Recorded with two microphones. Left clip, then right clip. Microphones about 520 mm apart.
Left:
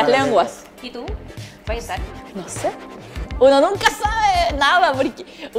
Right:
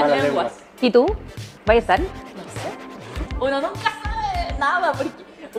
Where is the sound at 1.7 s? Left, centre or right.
Centre.